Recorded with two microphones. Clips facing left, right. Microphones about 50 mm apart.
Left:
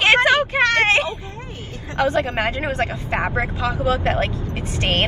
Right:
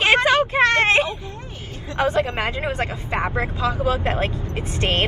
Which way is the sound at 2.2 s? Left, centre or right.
Left.